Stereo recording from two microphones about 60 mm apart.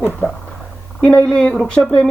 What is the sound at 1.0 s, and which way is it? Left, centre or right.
Speech, centre.